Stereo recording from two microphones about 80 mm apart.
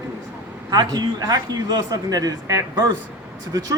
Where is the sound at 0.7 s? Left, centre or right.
Right.